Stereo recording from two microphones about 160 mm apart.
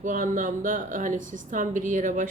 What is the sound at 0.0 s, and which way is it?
A woman's voice, 55° right (ahead or behind).